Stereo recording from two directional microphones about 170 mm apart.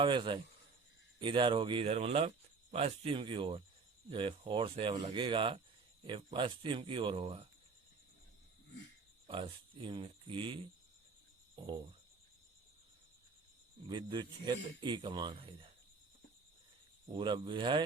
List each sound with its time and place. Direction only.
0.0 s a man's voice: 30° right (ahead or behind)
9.2 s speech: 30° right (ahead or behind)
11.5 s cricket: 25° right (ahead or behind)
13.8 s a man's voice: 25° right (ahead or behind)
17.2 s a man's voice: 30° right (ahead or behind)